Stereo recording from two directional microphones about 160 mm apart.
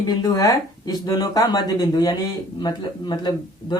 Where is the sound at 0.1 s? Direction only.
25° left (ahead or behind).